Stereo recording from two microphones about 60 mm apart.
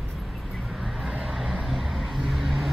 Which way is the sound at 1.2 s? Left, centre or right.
Centre.